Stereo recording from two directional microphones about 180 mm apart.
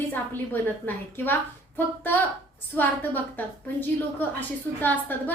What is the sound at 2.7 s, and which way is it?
A woman's voice, 10° left (ahead or behind).